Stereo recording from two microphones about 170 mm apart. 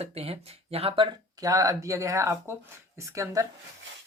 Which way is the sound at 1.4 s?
20° right (ahead or behind).